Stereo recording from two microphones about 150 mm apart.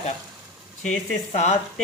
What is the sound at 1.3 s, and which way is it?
Speech, 50° left (ahead or behind).